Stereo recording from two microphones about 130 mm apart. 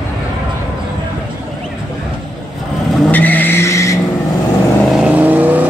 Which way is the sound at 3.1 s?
15° left (ahead or behind).